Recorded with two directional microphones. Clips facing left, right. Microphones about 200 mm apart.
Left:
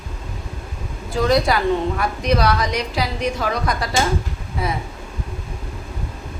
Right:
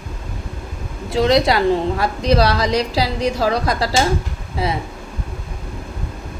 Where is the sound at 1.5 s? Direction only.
30° right (ahead or behind).